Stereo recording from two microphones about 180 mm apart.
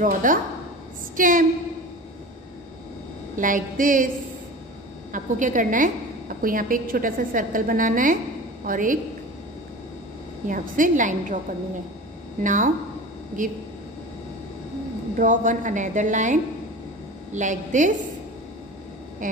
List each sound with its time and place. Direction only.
0.0 s a woman's voice: 45° right (ahead or behind)
3.3 s a woman's voice: 50° right (ahead or behind)
5.1 s a woman's voice: 45° right (ahead or behind)
10.5 s a woman's voice: 45° right (ahead or behind)
12.4 s a woman's voice: 45° right (ahead or behind)
15.1 s a woman's voice: 45° right (ahead or behind)
19.2 s a sound: 50° right (ahead or behind)